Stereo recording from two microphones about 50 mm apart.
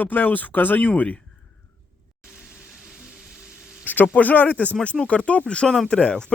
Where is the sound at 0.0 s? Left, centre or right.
Left.